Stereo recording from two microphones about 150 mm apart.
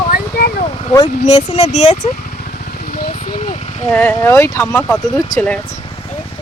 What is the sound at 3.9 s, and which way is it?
Speech, 15° left (ahead or behind).